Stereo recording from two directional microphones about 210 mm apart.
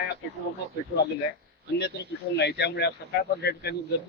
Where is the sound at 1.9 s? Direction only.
55° left (ahead or behind).